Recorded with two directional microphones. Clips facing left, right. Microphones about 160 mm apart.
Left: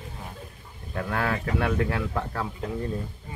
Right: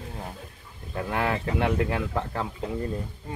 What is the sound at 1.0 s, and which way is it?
Speech, 15° right (ahead or behind).